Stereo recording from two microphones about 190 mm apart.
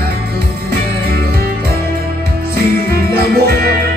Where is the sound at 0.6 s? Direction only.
55° right (ahead or behind).